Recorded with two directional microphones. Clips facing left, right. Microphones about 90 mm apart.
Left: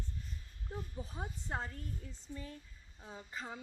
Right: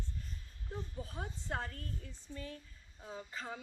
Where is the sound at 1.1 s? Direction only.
15° left (ahead or behind).